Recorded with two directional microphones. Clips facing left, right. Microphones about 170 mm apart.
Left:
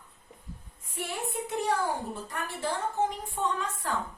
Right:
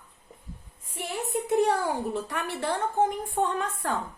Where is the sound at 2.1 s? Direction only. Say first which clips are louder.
Right 6 dB; 70° right (ahead or behind).